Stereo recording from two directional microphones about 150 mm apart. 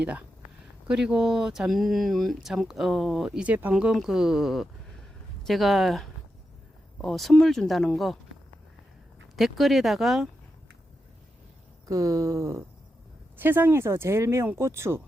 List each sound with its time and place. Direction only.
0.0 s speech: 10° right (ahead or behind)
9.3 s speech: centre (ahead or behind)
11.9 s speech: 20° right (ahead or behind)